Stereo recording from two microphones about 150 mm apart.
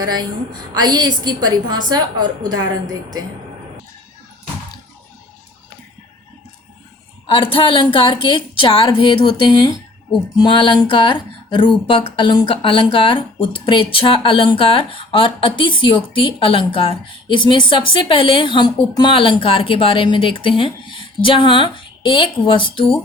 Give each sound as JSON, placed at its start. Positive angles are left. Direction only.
{"t": 0.0, "sound": "a woman's voice", "side_deg": -25}
{"t": 7.3, "sound": "speech", "side_deg": 35}